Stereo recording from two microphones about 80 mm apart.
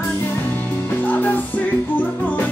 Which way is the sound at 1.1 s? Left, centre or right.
Left.